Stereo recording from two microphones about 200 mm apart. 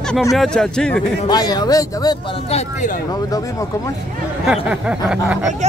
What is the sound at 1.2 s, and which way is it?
Speech, 20° left (ahead or behind).